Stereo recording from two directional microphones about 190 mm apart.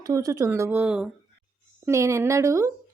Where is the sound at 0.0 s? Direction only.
15° right (ahead or behind).